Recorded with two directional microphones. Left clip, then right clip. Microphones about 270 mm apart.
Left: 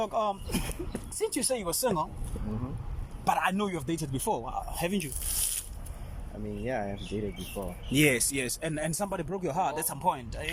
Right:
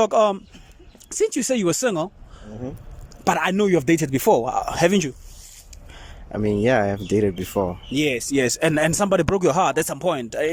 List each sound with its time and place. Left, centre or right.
0.0 s speech: right
3.2 s speech: right
6.4 s speech: right
7.9 s speech: centre
8.4 s speech: right